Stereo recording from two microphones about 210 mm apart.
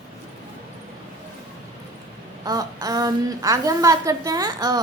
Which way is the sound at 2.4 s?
15° right (ahead or behind).